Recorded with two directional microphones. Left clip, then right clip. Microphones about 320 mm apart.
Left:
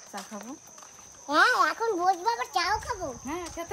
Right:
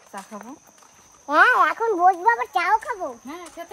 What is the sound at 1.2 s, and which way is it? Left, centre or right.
A child's voice, centre.